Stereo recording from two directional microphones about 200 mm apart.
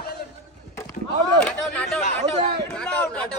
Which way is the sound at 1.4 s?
5° left (ahead or behind).